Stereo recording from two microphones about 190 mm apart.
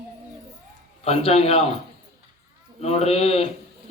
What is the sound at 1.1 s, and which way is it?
Speech, 30° left (ahead or behind).